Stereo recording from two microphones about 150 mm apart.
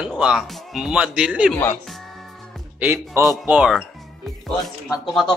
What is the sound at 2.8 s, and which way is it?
Speech, 15° right (ahead or behind).